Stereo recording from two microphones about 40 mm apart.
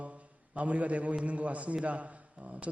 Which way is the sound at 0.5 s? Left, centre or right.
Right.